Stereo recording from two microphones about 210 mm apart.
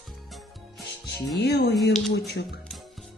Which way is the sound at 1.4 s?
50° left (ahead or behind).